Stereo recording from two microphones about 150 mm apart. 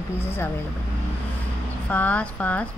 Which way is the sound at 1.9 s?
10° left (ahead or behind).